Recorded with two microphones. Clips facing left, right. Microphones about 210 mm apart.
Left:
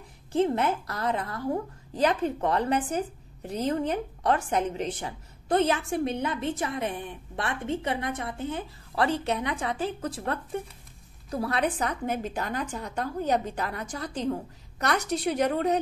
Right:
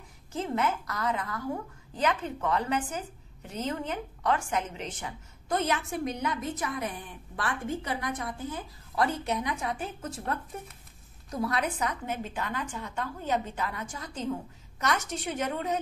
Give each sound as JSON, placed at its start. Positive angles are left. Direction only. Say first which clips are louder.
{"t": 0.3, "sound": "a woman's voice", "louder": "left 5 dB", "side_deg": 35}
{"t": 8.9, "sound": "a woman's voice", "louder": "left 2 dB", "side_deg": 70}
{"t": 9.8, "sound": "a woman's voice", "louder": "left 6 dB", "side_deg": 30}
{"t": 11.2, "sound": "a woman's voice", "louder": "left 3 dB", "side_deg": 30}
{"t": 13.9, "sound": "a woman's voice", "louder": "left 6 dB", "side_deg": 65}
{"t": 15.0, "sound": "a woman's voice", "louder": "left 6 dB", "side_deg": 35}